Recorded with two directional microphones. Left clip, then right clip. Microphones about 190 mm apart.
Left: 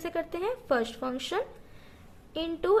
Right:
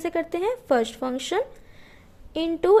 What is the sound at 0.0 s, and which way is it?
A woman's voice, 35° right (ahead or behind).